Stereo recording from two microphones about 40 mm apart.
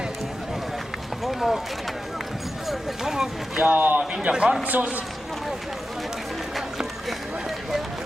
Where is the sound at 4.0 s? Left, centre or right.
Right.